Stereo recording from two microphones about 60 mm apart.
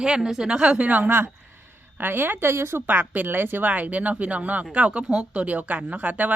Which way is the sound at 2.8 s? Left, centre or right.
Right.